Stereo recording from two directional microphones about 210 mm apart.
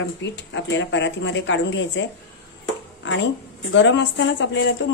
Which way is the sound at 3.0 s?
65° left (ahead or behind).